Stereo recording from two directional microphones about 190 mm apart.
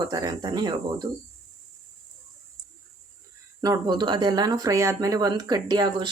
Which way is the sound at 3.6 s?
20° right (ahead or behind).